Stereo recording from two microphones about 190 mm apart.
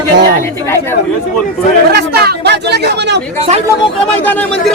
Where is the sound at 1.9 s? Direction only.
55° right (ahead or behind).